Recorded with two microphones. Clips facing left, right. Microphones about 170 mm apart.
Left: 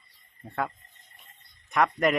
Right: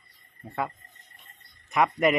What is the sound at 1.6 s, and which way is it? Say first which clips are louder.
Speech: right 1 dB; 5° right (ahead or behind).